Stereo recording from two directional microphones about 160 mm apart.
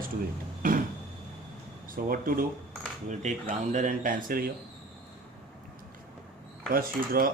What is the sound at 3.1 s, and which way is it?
Speech, 50° right (ahead or behind).